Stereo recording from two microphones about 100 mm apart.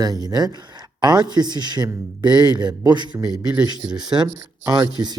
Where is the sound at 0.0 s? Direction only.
40° right (ahead or behind).